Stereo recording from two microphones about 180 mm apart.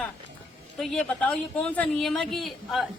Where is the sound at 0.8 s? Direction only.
Centre (ahead or behind).